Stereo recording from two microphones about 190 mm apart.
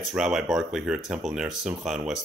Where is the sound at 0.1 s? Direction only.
Centre (ahead or behind).